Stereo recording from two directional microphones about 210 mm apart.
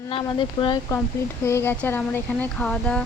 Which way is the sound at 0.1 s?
25° left (ahead or behind).